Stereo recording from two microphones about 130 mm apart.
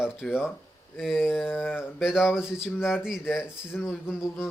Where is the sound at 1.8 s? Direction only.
5° right (ahead or behind).